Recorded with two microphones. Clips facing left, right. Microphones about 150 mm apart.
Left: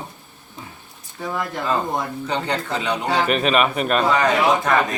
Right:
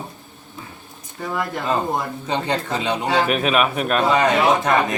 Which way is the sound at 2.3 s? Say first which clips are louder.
Right 2 dB; 20° right (ahead or behind).